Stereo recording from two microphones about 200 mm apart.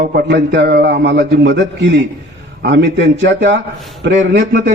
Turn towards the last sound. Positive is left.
turn(degrees=-60)  # may be behind; listen again after turning